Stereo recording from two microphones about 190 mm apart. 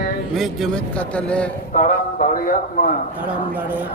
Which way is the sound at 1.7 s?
40° left (ahead or behind).